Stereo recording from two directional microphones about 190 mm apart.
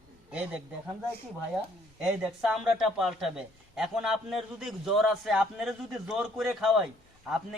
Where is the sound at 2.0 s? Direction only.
Centre (ahead or behind).